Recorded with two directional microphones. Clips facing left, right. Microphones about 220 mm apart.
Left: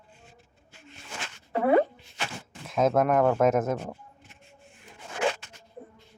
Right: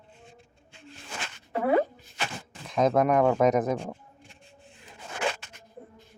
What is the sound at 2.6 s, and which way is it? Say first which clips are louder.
Speech: even; centre (ahead or behind).